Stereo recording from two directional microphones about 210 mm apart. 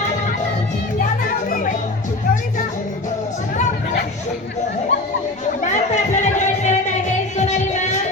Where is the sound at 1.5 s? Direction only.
40° left (ahead or behind).